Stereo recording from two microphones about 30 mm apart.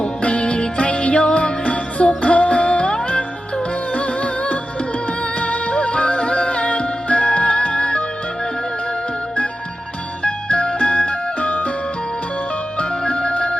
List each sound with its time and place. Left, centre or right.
0.0 s music: left
3.9 s music: left
10.2 s music: left
12.8 s music: left